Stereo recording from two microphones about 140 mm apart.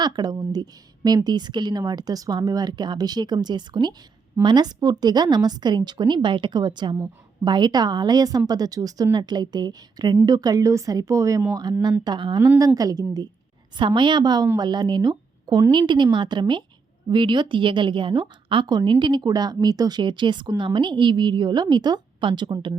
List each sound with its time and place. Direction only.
0.0 s a woman's voice: 30° right (ahead or behind)